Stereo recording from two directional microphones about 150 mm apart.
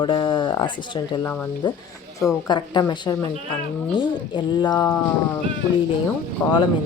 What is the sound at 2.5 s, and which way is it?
Speech, 30° left (ahead or behind).